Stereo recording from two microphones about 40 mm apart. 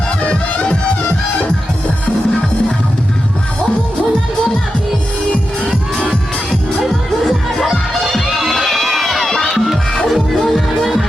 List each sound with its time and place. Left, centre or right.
0.2 s music: left
7.3 s music: centre